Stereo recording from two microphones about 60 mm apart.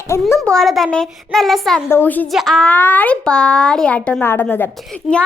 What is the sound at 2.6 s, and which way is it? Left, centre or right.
Speech, left.